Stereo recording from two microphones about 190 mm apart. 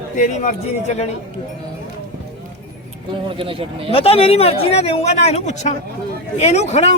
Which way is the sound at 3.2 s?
30° right (ahead or behind).